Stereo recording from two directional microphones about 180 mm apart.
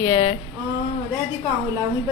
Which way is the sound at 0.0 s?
20° left (ahead or behind).